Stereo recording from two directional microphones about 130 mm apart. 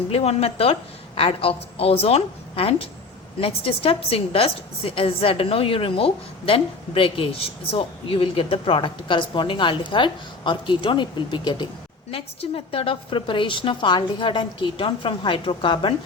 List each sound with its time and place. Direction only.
0.1 s a woman's voice: 55° left (ahead or behind); by 11.7 s 35° left (ahead or behind)
12.1 s a woman's voice: 45° left (ahead or behind)